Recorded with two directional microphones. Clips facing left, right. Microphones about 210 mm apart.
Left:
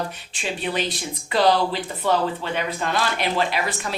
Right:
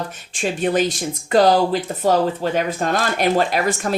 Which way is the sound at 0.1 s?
45° right (ahead or behind).